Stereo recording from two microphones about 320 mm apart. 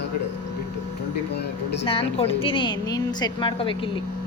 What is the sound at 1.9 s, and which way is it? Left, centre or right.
A woman's voice, centre.